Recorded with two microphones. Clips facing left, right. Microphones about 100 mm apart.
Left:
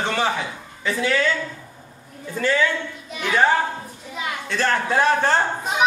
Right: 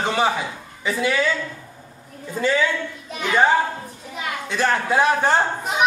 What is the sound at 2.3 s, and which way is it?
Speech, 15° right (ahead or behind).